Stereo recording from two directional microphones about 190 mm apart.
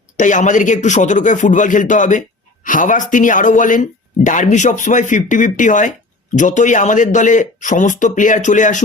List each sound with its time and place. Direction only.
0.2 s a man's voice: 40° left (ahead or behind)